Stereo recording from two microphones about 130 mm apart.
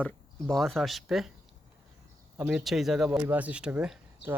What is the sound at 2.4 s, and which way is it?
Speech, 10° right (ahead or behind).